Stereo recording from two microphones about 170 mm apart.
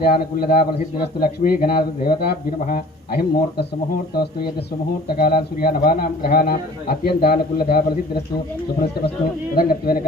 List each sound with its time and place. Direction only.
0.0 s speech: 60° left (ahead or behind)
9.6 s speech: 60° left (ahead or behind)